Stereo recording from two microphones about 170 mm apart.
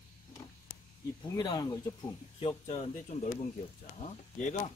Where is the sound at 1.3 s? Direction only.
25° left (ahead or behind).